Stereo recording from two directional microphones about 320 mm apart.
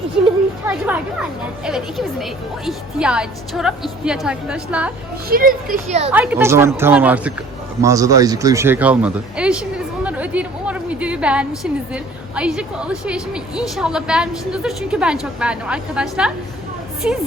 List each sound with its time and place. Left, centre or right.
0.6 s speech: centre
5.3 s speech: right
6.1 s speech: centre